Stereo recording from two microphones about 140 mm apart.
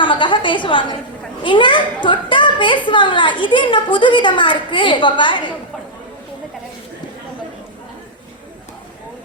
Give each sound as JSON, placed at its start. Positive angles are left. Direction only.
{"t": 0.0, "sound": "a child's voice", "side_deg": 35}